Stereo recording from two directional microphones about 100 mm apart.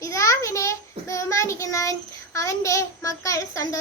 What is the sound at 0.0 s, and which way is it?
A child's voice, 30° left (ahead or behind).